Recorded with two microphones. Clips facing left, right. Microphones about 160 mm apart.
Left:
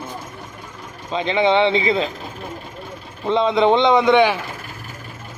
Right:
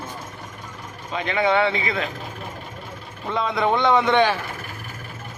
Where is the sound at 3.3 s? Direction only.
25° left (ahead or behind).